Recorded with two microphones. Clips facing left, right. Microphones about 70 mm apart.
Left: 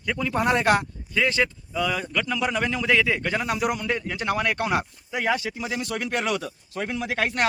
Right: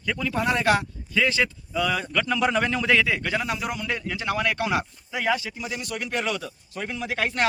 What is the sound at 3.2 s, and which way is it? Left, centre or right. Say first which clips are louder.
Speech: even; left.